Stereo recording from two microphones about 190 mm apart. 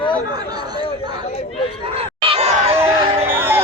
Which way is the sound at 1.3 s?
35° left (ahead or behind).